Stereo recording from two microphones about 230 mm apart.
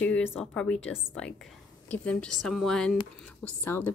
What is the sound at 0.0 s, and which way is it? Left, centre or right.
A woman's voice, centre.